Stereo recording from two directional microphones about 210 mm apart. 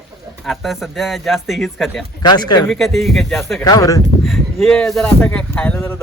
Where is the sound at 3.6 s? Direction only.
15° left (ahead or behind).